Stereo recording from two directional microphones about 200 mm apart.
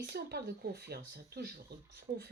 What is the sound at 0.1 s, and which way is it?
Speech, 55° right (ahead or behind).